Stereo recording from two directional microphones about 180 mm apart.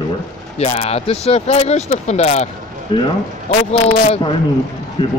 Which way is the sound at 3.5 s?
35° left (ahead or behind).